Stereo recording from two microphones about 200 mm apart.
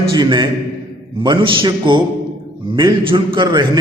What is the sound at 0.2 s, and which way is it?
A man's voice, 20° right (ahead or behind).